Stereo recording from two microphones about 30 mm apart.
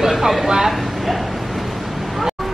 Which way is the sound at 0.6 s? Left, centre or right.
Centre.